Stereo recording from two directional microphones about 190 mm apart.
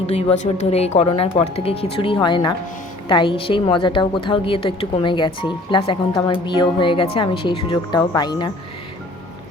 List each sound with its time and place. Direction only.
0.1 s a woman's voice: 35° left (ahead or behind)